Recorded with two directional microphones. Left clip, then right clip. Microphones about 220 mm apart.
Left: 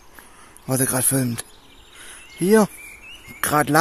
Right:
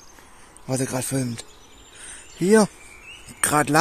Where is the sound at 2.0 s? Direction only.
5° left (ahead or behind).